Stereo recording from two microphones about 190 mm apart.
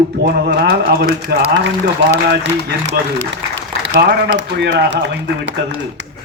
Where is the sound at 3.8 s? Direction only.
60° right (ahead or behind).